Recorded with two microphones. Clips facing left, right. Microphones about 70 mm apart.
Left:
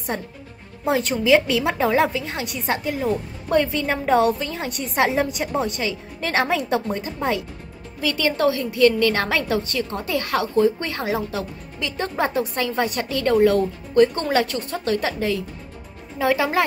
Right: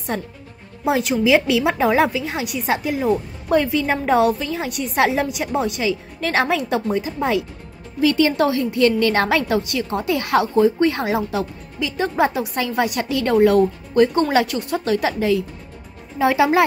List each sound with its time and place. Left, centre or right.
0.8 s speech: centre
8.0 s a woman's voice: right
11.8 s a woman's voice: centre